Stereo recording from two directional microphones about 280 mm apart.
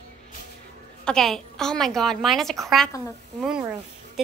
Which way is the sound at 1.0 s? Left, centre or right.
Centre.